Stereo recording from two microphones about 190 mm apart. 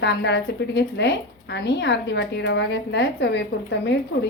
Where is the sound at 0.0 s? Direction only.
65° left (ahead or behind).